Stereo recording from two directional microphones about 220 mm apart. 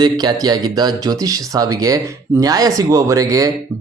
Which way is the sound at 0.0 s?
20° right (ahead or behind).